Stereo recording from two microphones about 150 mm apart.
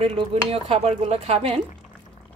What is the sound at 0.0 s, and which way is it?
Speech, 40° right (ahead or behind).